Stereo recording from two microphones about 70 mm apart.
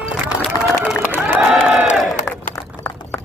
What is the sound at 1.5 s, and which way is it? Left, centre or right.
Crowd, centre.